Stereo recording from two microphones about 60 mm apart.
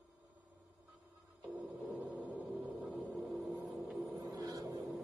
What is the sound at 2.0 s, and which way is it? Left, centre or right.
Music, right.